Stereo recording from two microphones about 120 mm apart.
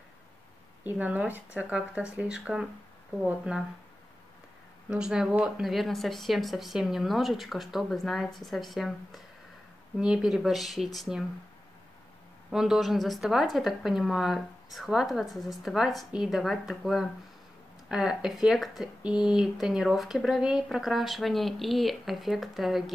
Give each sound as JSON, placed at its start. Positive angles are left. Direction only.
{"t": 0.8, "sound": "speech", "side_deg": -10}
{"t": 4.8, "sound": "speech", "side_deg": -5}
{"t": 12.4, "sound": "speech", "side_deg": -5}